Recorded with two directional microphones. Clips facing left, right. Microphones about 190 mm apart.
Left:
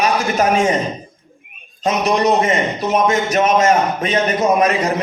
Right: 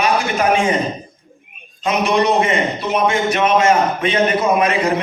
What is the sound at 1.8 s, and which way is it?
A man's voice, 40° left (ahead or behind).